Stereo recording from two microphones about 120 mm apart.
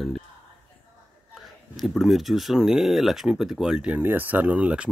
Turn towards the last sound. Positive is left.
turn(degrees=-10)  # may be behind; listen again after turning